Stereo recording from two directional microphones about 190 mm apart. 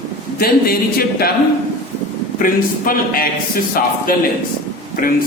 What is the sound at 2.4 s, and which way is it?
Speech, 50° left (ahead or behind).